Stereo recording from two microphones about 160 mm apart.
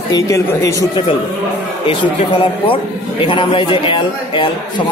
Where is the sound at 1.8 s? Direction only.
35° left (ahead or behind).